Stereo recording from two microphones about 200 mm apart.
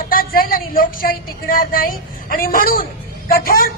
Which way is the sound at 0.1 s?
45° left (ahead or behind).